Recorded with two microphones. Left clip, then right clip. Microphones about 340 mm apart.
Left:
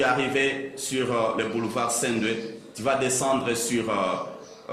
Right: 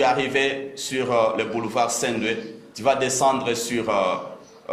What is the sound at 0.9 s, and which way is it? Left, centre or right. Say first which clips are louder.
Speech: right 4 dB; centre.